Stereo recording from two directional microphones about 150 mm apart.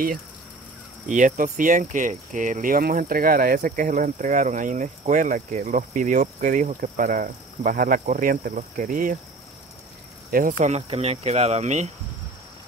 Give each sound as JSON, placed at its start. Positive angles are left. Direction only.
{"t": 1.0, "sound": "speech", "side_deg": -55}
{"t": 10.3, "sound": "speech", "side_deg": -60}